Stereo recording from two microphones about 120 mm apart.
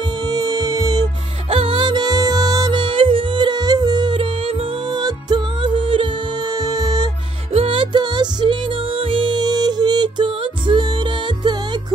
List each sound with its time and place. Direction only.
0.0 s music: 35° right (ahead or behind)
1.5 s music: 45° right (ahead or behind)
7.5 s music: 50° right (ahead or behind)